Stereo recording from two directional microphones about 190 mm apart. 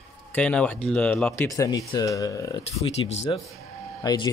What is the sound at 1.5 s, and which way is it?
Speech, 20° left (ahead or behind).